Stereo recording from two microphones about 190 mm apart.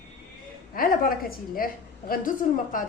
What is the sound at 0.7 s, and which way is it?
A woman's voice, 50° left (ahead or behind).